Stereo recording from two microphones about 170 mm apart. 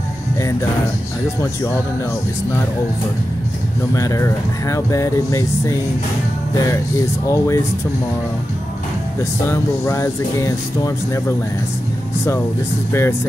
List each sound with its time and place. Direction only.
0.4 s speech: 20° left (ahead or behind)
3.9 s speech: 20° left (ahead or behind)
7.2 s speech: 20° left (ahead or behind)
9.5 s speech: 15° left (ahead or behind)
12.9 s speech: 15° left (ahead or behind)